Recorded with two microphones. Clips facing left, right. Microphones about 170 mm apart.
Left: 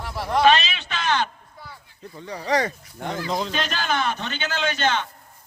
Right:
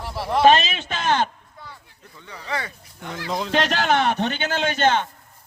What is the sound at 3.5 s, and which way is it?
A man's voice, 75° right (ahead or behind).